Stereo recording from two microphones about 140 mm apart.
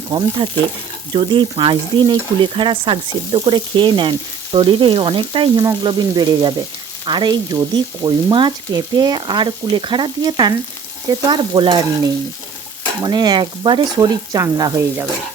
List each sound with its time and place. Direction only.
0.1 s stir: 35° right (ahead or behind)
13.0 s frying: 30° right (ahead or behind)